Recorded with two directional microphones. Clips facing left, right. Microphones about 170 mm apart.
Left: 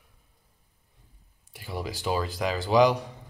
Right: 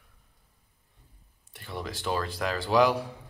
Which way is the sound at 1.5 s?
5° left (ahead or behind).